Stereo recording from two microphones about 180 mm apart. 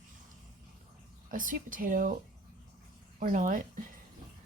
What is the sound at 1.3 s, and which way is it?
Speech, 50° right (ahead or behind).